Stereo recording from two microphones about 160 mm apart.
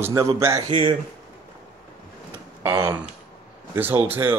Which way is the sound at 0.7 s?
35° right (ahead or behind).